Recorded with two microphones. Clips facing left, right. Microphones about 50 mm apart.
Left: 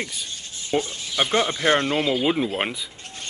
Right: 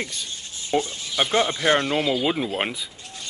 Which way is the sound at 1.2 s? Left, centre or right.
Centre.